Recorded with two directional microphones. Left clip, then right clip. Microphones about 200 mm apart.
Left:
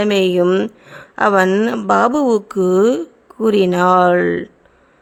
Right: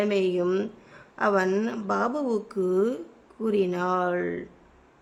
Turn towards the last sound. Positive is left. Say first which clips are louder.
# left 14 dB
turn(degrees=40)  # may be behind; listen again after turning